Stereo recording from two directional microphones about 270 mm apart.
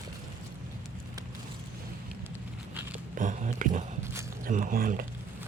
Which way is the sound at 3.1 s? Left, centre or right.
Right.